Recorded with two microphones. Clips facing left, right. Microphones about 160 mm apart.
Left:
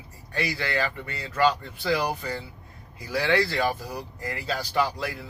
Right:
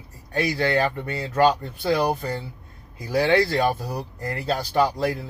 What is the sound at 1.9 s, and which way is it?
Speech, 30° right (ahead or behind).